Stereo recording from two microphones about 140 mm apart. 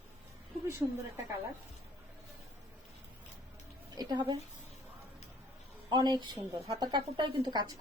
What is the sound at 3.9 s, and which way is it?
Speech, 30° right (ahead or behind).